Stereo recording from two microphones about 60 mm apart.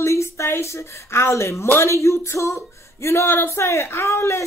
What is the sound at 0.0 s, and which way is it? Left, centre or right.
A woman's voice, left.